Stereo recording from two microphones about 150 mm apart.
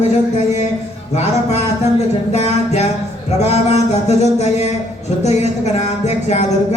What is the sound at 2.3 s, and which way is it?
Music, 45° left (ahead or behind).